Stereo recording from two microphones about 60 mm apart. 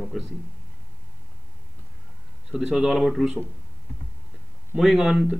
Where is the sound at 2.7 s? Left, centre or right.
Centre.